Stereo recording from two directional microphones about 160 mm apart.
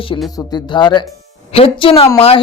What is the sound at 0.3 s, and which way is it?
Speech, 25° left (ahead or behind).